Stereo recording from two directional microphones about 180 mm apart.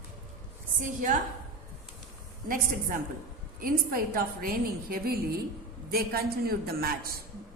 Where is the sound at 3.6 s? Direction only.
55° right (ahead or behind).